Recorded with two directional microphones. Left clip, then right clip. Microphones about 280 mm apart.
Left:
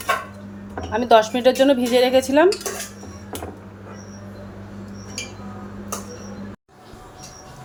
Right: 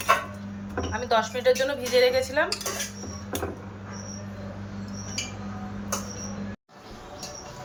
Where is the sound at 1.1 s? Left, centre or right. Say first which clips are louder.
Left 8 dB; left.